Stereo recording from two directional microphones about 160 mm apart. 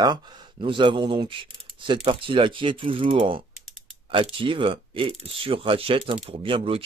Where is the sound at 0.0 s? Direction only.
30° right (ahead or behind).